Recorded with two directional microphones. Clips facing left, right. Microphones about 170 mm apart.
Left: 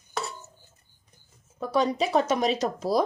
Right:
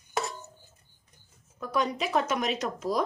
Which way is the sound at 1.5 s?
30° left (ahead or behind).